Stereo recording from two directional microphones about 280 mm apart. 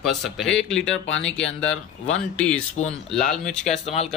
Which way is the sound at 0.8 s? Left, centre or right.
Left.